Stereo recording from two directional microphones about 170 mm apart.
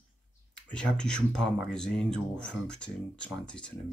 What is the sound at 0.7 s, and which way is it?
Speech, 5° left (ahead or behind).